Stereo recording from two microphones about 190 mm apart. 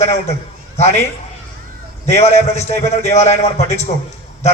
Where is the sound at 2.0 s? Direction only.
35° left (ahead or behind).